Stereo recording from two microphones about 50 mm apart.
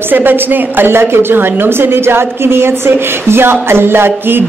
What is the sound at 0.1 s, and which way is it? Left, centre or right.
A woman's voice, right.